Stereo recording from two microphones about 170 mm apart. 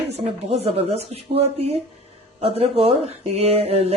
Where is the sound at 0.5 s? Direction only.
40° right (ahead or behind).